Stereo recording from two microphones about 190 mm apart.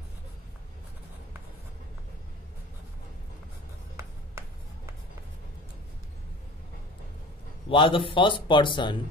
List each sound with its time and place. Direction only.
3.9 s writing: 15° right (ahead or behind)
7.7 s a man's voice: 25° left (ahead or behind)